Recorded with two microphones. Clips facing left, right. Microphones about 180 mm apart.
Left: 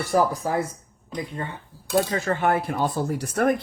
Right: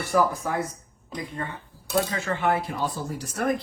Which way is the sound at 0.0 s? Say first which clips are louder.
Left 2 dB; 40° left (ahead or behind).